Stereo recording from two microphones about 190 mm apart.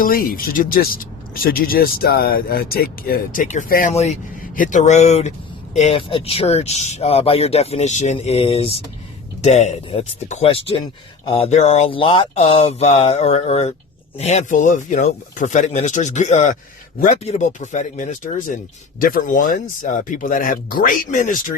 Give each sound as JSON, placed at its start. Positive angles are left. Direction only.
{"t": 0.0, "sound": "speech", "side_deg": 50}